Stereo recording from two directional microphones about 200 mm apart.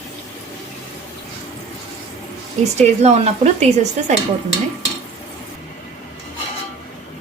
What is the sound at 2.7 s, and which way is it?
Speech, 35° right (ahead or behind).